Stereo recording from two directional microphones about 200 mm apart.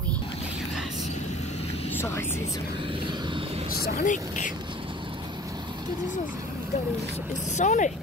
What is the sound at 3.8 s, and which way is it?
Speech, 50° left (ahead or behind).